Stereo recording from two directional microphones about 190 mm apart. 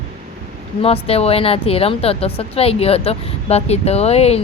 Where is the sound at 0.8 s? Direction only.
30° left (ahead or behind).